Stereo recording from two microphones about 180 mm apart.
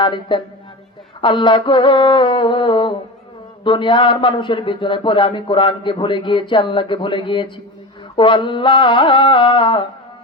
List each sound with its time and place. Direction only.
0.0 s a man's voice: 25° left (ahead or behind)